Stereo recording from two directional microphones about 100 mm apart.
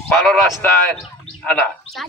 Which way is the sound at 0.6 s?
15° left (ahead or behind).